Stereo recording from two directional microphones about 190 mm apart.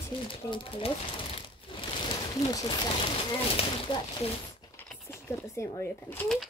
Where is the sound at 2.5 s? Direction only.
20° left (ahead or behind).